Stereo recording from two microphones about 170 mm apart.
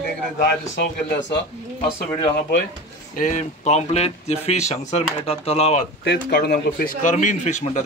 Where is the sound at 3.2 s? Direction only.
45° left (ahead or behind).